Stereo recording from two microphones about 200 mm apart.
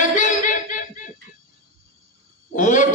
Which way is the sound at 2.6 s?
40° left (ahead or behind).